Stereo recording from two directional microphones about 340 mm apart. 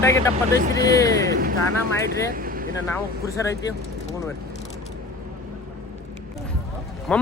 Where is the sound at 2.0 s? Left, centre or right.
Right.